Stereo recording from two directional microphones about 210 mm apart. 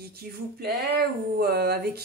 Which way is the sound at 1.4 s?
50° right (ahead or behind).